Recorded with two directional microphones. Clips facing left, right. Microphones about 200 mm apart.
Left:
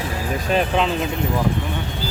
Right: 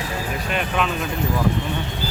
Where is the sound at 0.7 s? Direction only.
30° left (ahead or behind).